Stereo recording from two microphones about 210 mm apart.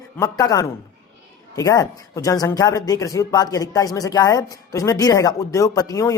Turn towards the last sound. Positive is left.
turn(degrees=15)  # may be behind; listen again after turning